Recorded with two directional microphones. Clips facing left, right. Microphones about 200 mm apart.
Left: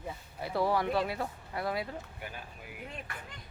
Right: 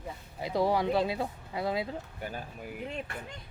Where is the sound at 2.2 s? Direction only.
40° right (ahead or behind).